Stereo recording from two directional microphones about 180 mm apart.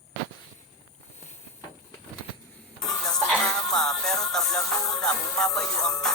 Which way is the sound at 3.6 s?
5° left (ahead or behind).